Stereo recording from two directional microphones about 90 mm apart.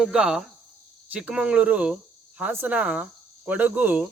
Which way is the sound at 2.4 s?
20° right (ahead or behind).